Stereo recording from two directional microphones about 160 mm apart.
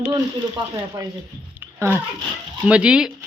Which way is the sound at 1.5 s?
10° right (ahead or behind).